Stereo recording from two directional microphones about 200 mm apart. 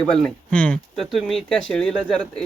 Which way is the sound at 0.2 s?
5° left (ahead or behind).